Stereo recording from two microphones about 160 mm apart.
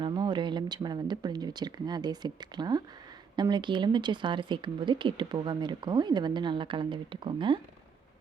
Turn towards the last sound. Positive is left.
turn(degrees=-30)  # may be behind; listen again after turning